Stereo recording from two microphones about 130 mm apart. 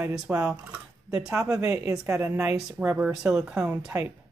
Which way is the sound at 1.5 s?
20° right (ahead or behind).